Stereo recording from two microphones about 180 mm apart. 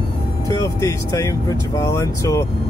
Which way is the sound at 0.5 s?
20° left (ahead or behind).